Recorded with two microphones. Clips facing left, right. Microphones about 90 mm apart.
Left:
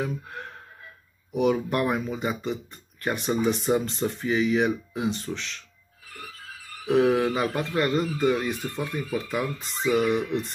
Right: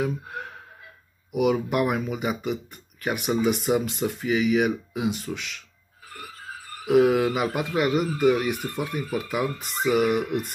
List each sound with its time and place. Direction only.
0.0 s speech: 10° right (ahead or behind)
6.0 s a sound: 55° right (ahead or behind)
6.9 s speech: 10° right (ahead or behind)